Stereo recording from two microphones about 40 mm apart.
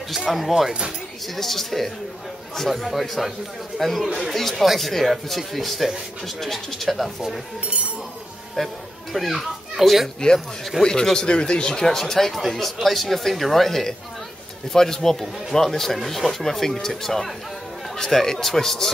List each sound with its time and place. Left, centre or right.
0.1 s speech: centre
7.6 s speech: right
8.6 s a child's voice: centre
10.8 s speech: centre